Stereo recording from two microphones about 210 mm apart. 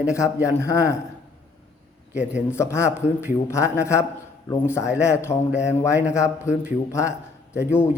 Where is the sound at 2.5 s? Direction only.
15° left (ahead or behind).